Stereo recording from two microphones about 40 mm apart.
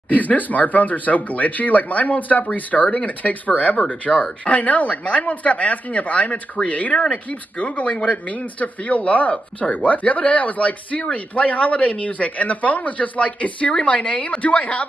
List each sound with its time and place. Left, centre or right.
0.1 s speech: left
11.0 s speech: left
11.4 s speech: left